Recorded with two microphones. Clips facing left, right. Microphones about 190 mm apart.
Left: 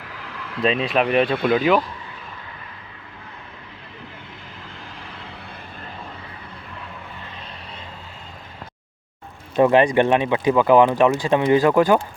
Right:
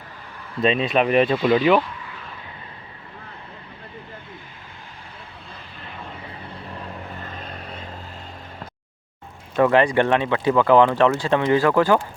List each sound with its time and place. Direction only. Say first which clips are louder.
0.1 s a sound: left 4 dB; 90° left
0.6 s speech: right 1 dB; centre (ahead or behind)
1.4 s speech: right 1 dB; 55° left (ahead or behind)
7.3 s vehicle: right 3 dB; 45° right (ahead or behind)
9.6 s speech: left 2 dB; 20° left (ahead or behind)